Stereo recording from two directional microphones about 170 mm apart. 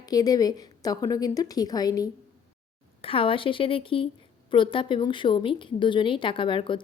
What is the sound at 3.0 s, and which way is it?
A woman's voice, 35° left (ahead or behind).